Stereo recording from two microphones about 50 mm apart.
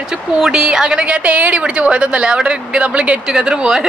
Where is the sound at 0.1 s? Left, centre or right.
Centre.